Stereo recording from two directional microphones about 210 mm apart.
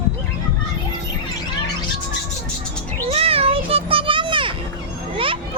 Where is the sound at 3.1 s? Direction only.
30° right (ahead or behind).